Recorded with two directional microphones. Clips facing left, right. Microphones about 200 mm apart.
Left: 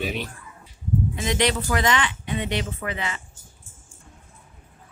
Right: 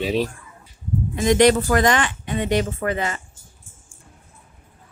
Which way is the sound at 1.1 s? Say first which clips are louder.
Right 12 dB; 45° right (ahead or behind).